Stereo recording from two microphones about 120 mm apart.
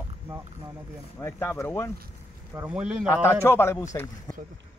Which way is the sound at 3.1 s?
20° left (ahead or behind).